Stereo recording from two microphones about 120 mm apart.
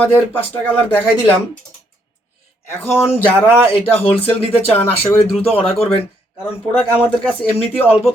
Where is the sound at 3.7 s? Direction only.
50° left (ahead or behind).